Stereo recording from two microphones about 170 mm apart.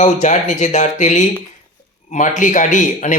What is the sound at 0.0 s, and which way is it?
A man's voice, 45° left (ahead or behind).